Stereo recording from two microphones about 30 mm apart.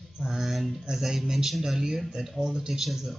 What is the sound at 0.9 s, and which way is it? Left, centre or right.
Speech, centre.